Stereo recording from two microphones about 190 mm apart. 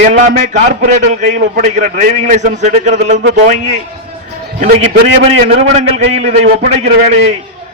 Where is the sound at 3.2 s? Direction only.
70° right (ahead or behind).